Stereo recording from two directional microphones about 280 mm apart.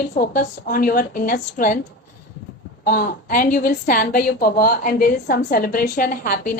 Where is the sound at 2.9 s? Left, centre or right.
Left.